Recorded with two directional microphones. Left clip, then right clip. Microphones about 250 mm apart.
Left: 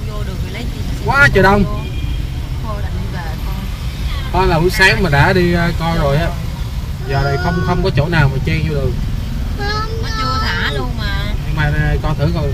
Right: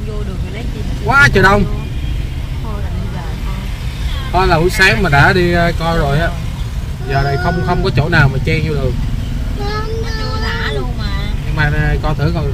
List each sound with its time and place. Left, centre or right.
1.0 s speech: centre
4.3 s speech: centre
11.5 s speech: centre